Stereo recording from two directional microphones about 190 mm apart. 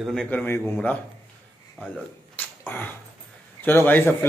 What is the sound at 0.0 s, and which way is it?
A man's voice, 5° left (ahead or behind).